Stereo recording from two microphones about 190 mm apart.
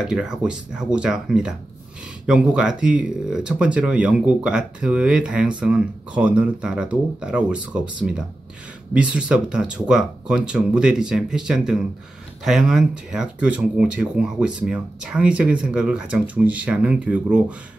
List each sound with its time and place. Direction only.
0.0 s speech: 5° right (ahead or behind)